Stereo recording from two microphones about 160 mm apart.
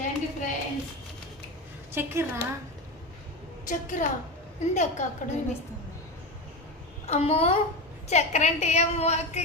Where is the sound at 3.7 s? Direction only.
55° left (ahead or behind).